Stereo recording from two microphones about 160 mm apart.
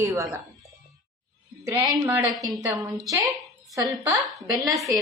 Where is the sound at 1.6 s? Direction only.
20° right (ahead or behind).